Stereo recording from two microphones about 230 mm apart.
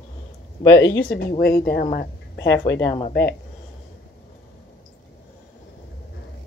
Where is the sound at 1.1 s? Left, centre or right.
Left.